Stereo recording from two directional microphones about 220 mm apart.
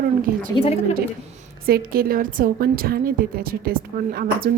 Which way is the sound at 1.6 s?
45° right (ahead or behind).